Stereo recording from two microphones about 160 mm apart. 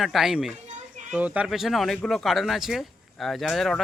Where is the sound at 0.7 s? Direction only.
50° right (ahead or behind).